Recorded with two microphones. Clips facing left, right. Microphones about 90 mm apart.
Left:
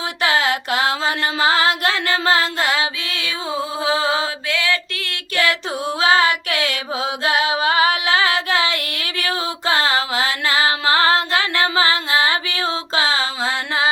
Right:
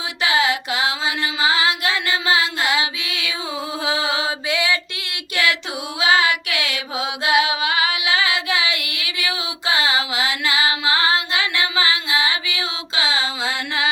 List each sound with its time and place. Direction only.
0.2 s music: 50° left (ahead or behind)
3.8 s mantra: 35° left (ahead or behind)
4.4 s a sound: 15° right (ahead or behind)
6.0 s child singing: 40° left (ahead or behind)
6.7 s music: 40° left (ahead or behind)
10.5 s female singing: 45° left (ahead or behind)